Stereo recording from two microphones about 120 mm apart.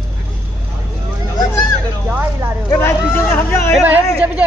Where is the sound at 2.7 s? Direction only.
20° left (ahead or behind).